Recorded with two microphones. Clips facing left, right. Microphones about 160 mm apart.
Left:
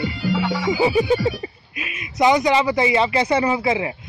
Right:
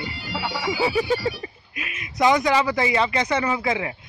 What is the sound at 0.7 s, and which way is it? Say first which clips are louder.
Speech: left 4 dB; 20° left (ahead or behind).